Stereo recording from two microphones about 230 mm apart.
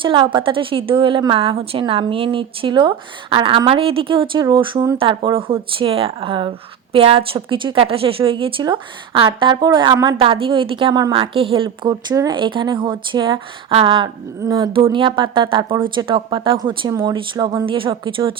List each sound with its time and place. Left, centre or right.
0.0 s a woman's voice: right